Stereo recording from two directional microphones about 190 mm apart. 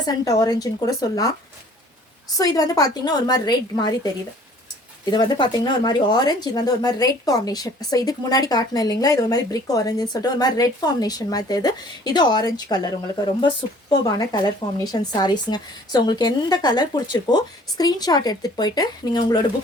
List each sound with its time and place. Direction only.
0.0 s speech: 20° left (ahead or behind)
2.4 s speech: 20° left (ahead or behind)
5.1 s speech: 25° left (ahead or behind)